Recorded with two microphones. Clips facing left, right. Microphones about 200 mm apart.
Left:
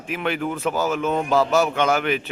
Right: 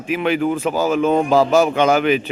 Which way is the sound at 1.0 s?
30° right (ahead or behind).